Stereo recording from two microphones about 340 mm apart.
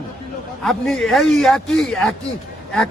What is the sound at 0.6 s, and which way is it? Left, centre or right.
Speech, centre.